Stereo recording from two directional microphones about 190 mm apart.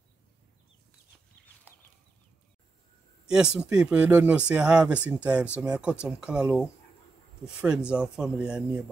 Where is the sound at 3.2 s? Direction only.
5° right (ahead or behind).